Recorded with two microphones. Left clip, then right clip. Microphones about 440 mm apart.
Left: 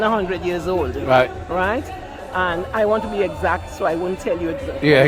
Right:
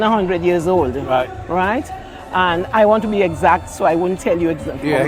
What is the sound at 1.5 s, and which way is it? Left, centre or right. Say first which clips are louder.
A man's voice: right 3 dB; right.